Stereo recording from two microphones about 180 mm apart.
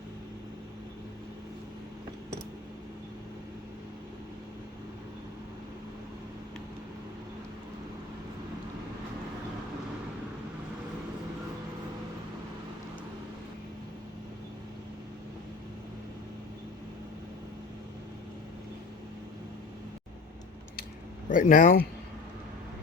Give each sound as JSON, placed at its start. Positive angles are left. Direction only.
{"t": 21.2, "sound": "speech", "side_deg": 45}